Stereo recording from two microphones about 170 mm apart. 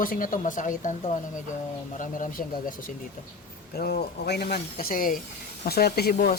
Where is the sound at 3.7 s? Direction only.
65° left (ahead or behind).